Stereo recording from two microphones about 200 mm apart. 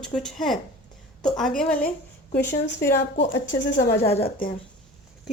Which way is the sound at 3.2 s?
60° left (ahead or behind).